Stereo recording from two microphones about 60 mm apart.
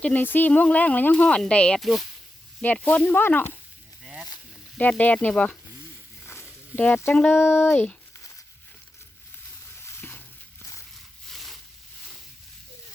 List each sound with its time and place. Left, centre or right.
0.0 s speech: left
1.1 s speech: centre
1.8 s speech: centre
2.8 s speech: left
3.2 s speech: left
4.0 s a sound: centre
4.8 s speech: left
6.7 s speech: left
7.3 s speech: left
9.8 s stir: left
11.3 s a sound: centre